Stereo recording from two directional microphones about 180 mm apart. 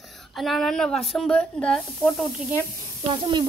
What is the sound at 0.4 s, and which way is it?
Speech, centre (ahead or behind).